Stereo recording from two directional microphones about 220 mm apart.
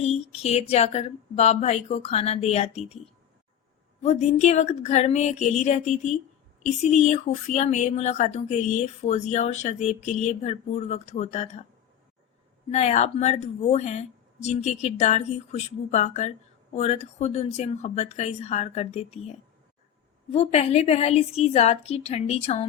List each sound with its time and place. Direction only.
0.0 s speech: 30° left (ahead or behind)
4.0 s speech: 30° left (ahead or behind)
12.7 s speech: 30° left (ahead or behind)
20.3 s speech: 30° left (ahead or behind)